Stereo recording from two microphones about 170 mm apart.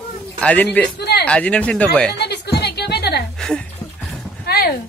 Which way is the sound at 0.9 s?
75° left (ahead or behind).